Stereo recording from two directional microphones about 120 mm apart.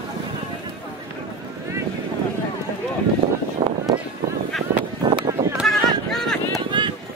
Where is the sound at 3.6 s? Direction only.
35° right (ahead or behind).